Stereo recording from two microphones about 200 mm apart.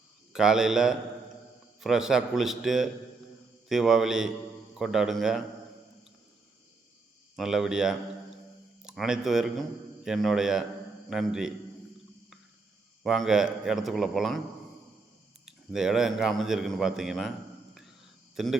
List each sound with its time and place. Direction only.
0.3 s a man's voice: centre (ahead or behind)
7.3 s a man's voice: centre (ahead or behind)
13.0 s a man's voice: centre (ahead or behind)
15.4 s a man's voice: centre (ahead or behind)
18.4 s a man's voice: centre (ahead or behind)